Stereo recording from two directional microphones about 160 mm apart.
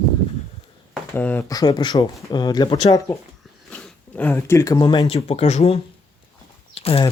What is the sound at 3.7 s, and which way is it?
Speech, 10° left (ahead or behind).